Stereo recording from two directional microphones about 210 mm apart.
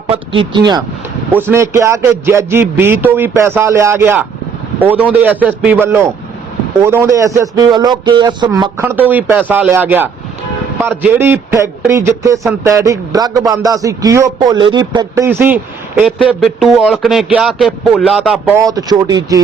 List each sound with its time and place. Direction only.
0.1 s speech: 25° right (ahead or behind)
1.3 s a man's voice: 10° right (ahead or behind)
18.5 s a man's voice: 15° right (ahead or behind)